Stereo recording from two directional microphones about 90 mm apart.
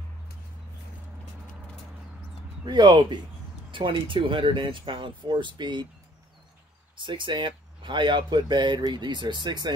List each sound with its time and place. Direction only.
2.6 s speech: 55° right (ahead or behind)
3.7 s speech: 65° right (ahead or behind)
7.0 s speech: 65° right (ahead or behind)